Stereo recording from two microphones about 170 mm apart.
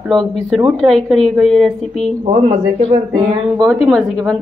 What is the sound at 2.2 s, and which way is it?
Speech, 40° right (ahead or behind).